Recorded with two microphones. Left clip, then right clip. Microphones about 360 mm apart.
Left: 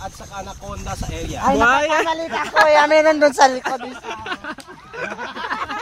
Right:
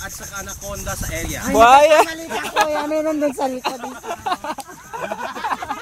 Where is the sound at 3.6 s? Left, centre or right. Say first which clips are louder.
Left 1 dB; centre.